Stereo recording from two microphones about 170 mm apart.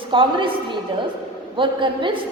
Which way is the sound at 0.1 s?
30° right (ahead or behind).